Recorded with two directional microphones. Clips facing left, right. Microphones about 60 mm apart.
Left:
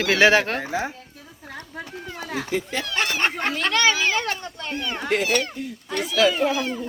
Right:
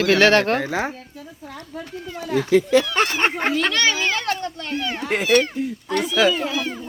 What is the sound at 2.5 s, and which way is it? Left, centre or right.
Speech, right.